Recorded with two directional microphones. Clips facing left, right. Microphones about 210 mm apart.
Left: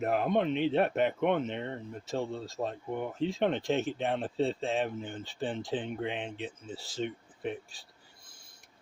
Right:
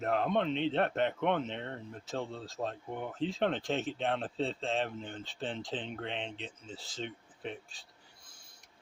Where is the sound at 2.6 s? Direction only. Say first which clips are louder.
Left 2 dB; 50° left (ahead or behind).